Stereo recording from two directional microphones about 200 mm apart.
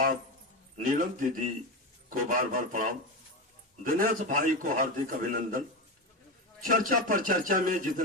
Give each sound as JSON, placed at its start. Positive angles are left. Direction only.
{"t": 0.9, "sound": "a man's voice", "side_deg": -45}
{"t": 3.8, "sound": "a man's voice", "side_deg": -45}
{"t": 6.7, "sound": "a man's voice", "side_deg": -40}